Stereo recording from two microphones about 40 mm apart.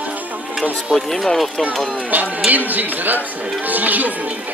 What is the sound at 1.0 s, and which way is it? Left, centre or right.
Speech, centre.